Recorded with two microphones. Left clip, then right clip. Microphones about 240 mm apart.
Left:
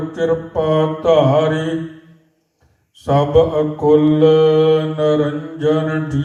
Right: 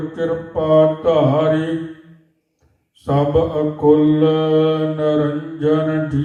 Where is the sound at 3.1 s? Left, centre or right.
Left.